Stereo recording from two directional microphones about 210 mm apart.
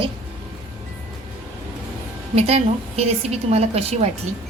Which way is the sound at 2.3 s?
30° right (ahead or behind).